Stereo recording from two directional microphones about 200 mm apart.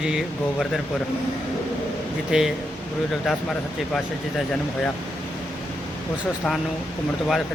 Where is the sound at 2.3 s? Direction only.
Centre (ahead or behind).